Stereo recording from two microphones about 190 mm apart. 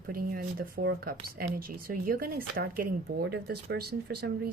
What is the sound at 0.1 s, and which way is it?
A woman's voice, 50° right (ahead or behind).